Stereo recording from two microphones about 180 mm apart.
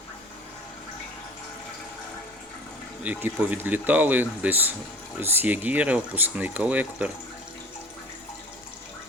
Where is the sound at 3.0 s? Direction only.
10° right (ahead or behind).